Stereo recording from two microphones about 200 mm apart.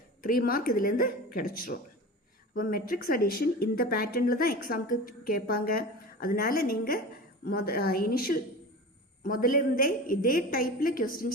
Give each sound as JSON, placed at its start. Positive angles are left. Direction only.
{"t": 0.2, "sound": "speech", "side_deg": 45}